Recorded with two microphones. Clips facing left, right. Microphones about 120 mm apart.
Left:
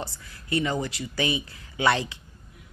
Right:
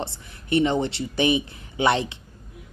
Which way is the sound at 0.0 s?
25° right (ahead or behind).